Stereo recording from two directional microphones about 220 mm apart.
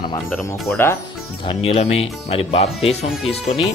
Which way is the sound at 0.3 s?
5° left (ahead or behind).